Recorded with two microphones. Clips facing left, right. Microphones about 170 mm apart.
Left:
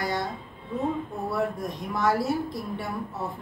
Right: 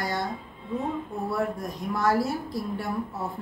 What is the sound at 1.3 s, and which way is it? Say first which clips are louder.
Speech: left 1 dB; centre (ahead or behind).